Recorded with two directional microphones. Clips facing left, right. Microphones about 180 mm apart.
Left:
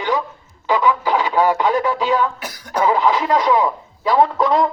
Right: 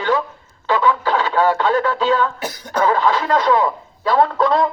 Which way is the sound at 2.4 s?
25° right (ahead or behind).